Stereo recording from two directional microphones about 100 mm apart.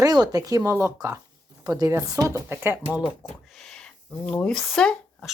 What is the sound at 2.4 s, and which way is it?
Speech, 20° right (ahead or behind).